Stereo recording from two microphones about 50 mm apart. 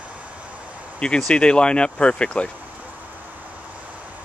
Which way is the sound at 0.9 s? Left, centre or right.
Centre.